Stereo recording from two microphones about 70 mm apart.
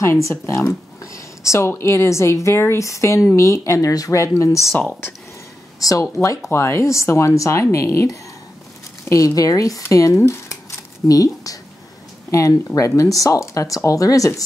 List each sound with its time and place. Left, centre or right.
0.0 s a woman's voice: left
5.8 s speech: left
6.2 s a woman's voice: left
9.1 s a woman's voice: left
11.1 s a woman's voice: left